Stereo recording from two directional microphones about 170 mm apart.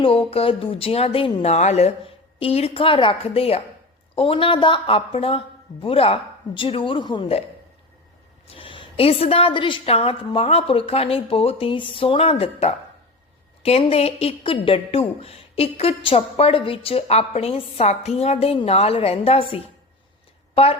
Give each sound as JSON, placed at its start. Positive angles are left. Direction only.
{"t": 0.0, "sound": "a woman's voice", "side_deg": 35}
{"t": 8.4, "sound": "a woman's voice", "side_deg": 30}